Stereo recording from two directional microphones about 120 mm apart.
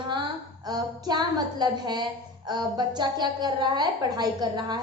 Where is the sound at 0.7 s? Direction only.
35° right (ahead or behind).